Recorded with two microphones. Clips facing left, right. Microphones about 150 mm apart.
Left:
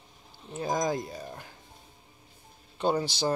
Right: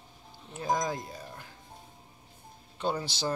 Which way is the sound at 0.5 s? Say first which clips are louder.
Left 2 dB; 35° left (ahead or behind).